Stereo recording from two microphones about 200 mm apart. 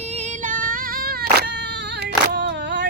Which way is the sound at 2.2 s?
60° right (ahead or behind).